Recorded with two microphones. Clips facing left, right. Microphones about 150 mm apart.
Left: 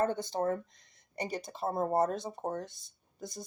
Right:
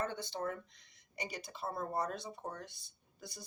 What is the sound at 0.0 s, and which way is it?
Speech, 45° left (ahead or behind).